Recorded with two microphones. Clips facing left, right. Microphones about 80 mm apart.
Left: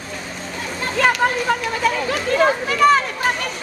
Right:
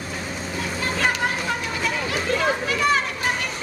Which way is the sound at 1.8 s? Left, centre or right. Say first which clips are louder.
Left 5 dB; left.